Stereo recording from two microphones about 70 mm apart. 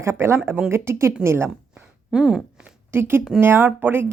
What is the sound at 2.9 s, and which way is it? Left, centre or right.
A woman's voice, right.